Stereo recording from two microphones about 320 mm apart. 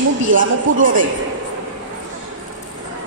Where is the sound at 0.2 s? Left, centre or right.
Right.